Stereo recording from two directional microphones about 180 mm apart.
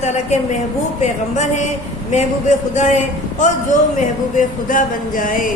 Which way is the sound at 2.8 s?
45° left (ahead or behind).